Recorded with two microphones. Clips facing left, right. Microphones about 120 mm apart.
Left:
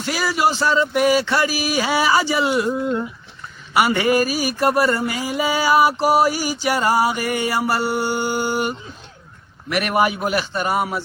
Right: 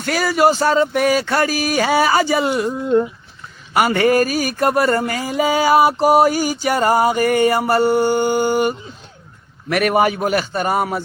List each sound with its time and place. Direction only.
0.0 s mantra: 50° right (ahead or behind)
0.9 s speech: 5° left (ahead or behind)
1.2 s mantra: 45° right (ahead or behind)
3.8 s mantra: 45° right (ahead or behind)
4.2 s a sound: 5° left (ahead or behind)
4.6 s mantra: 45° right (ahead or behind)